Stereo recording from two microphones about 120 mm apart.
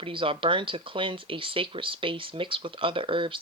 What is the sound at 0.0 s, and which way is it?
Speech, 45° right (ahead or behind).